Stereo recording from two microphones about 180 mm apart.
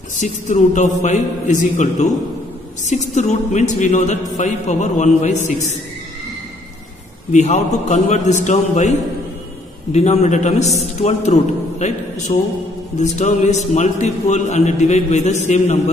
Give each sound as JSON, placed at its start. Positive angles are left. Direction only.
{"t": 0.2, "sound": "a man's voice", "side_deg": 40}
{"t": 7.3, "sound": "a man's voice", "side_deg": 40}
{"t": 9.9, "sound": "a man's voice", "side_deg": 40}